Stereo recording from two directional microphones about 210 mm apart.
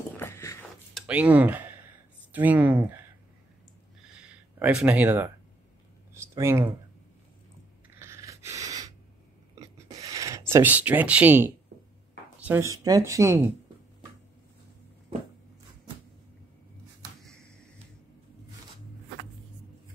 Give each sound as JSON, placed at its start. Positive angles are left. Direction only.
{"t": 0.2, "sound": "a sound", "side_deg": 10}
{"t": 0.9, "sound": "speech", "side_deg": -5}
{"t": 4.0, "sound": "a sound", "side_deg": -5}
{"t": 6.3, "sound": "speech", "side_deg": -10}
{"t": 8.0, "sound": "snort", "side_deg": -15}
{"t": 9.6, "sound": "whispering", "side_deg": -15}
{"t": 10.5, "sound": "speech", "side_deg": -10}